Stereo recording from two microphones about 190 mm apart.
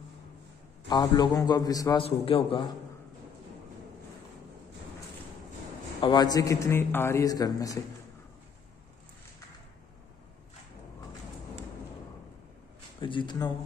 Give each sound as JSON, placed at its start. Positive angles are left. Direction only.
{"t": 0.8, "sound": "a man's voice", "side_deg": 20}
{"t": 2.0, "sound": "a man's voice", "side_deg": 30}
{"t": 5.9, "sound": "a man's voice", "side_deg": 20}
{"t": 13.0, "sound": "a man's voice", "side_deg": 25}